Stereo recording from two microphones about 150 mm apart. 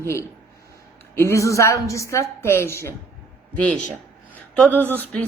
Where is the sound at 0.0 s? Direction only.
20° left (ahead or behind).